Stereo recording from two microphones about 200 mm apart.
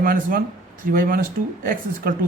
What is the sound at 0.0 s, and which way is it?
Speech, 45° right (ahead or behind).